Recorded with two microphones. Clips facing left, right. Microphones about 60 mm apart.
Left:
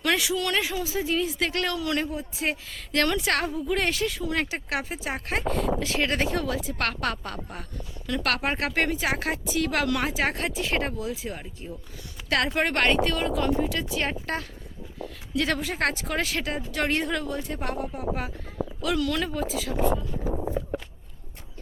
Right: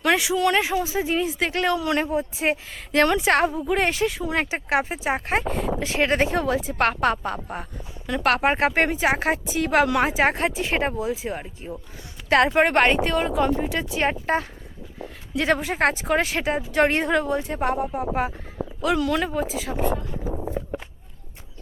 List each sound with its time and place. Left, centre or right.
0.0 s speech: centre